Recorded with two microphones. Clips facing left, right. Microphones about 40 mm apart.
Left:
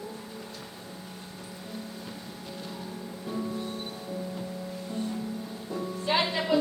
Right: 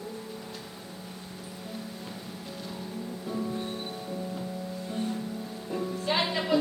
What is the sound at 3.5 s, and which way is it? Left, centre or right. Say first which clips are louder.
Music: right 1 dB; right.